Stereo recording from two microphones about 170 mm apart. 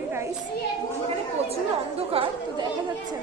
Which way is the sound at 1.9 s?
35° right (ahead or behind).